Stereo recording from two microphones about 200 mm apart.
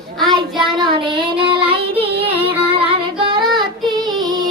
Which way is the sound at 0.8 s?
25° right (ahead or behind).